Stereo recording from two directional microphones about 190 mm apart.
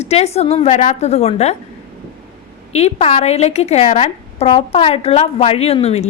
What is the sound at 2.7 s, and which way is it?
A woman's voice, 35° left (ahead or behind).